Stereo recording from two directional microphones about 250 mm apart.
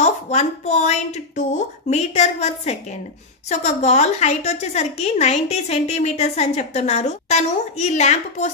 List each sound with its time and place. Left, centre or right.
0.0 s a woman's voice: left